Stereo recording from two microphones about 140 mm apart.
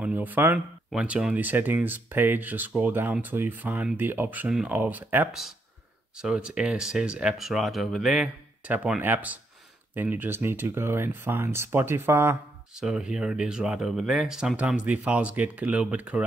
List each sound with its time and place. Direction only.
0.0 s speech: 10° right (ahead or behind)
12.8 s speech: 5° right (ahead or behind)